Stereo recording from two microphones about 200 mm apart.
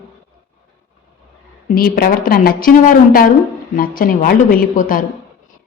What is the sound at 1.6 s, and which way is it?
A woman's voice, 45° left (ahead or behind).